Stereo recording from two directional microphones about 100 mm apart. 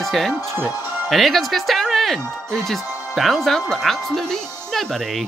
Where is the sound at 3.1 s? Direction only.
Centre (ahead or behind).